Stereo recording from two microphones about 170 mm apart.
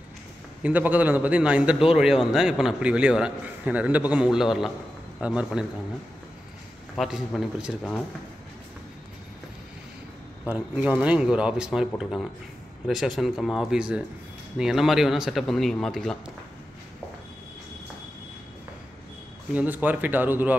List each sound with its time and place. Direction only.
0.6 s a man's voice: 10° right (ahead or behind)
7.0 s speech: centre (ahead or behind)
10.4 s speech: 10° right (ahead or behind)
19.5 s a man's voice: 10° right (ahead or behind)